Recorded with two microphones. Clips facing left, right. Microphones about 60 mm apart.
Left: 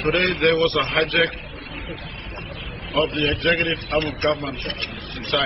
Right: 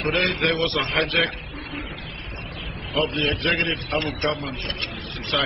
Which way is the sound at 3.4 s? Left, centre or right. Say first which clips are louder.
Left 3 dB; centre.